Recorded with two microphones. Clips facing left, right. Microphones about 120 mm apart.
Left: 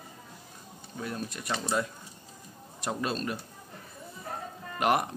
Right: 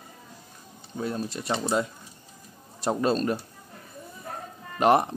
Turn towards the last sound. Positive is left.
turn(degrees=-30)  # may be behind; listen again after turning